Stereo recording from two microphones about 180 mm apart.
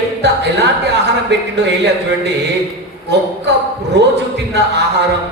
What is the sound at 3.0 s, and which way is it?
Speech, 70° right (ahead or behind).